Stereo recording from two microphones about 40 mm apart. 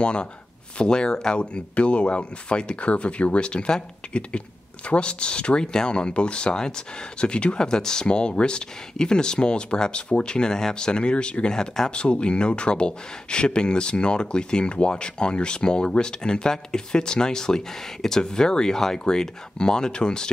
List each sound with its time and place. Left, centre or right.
0.0 s speech: left
11.9 s speech: left